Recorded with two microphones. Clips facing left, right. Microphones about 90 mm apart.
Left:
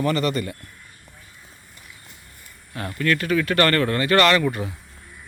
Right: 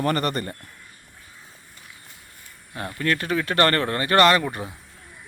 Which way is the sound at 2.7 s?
20° right (ahead or behind).